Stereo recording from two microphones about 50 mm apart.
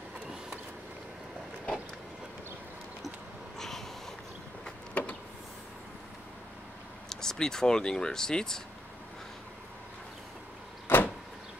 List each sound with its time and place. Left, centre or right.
3.5 s a sound: centre
5.0 s power windows: left
7.1 s speech: centre
10.9 s vehicle: left